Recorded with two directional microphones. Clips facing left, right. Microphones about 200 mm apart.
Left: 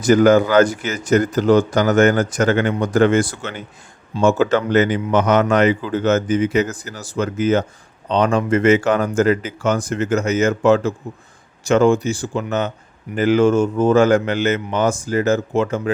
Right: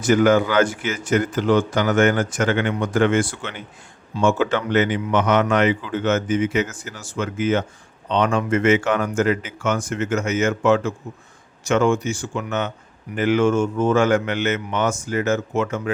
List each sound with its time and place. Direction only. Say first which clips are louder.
0.0 s speech: left 4 dB; 40° left (ahead or behind)